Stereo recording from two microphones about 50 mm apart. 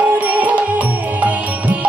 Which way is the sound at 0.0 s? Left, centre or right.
Right.